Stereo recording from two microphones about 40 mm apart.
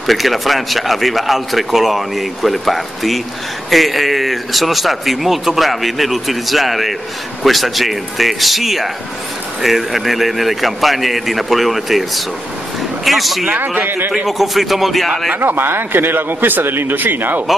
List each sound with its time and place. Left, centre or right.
0.0 s speech: centre
13.8 s speech: right
14.2 s speech: centre
15.3 s speech: right